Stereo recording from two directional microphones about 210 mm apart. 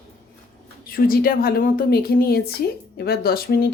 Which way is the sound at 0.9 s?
45° left (ahead or behind).